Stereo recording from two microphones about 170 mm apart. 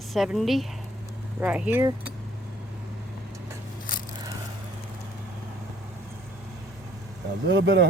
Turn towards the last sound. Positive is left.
turn(degrees=-90)